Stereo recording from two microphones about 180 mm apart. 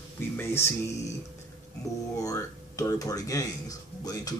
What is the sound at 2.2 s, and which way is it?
Speech, 20° left (ahead or behind).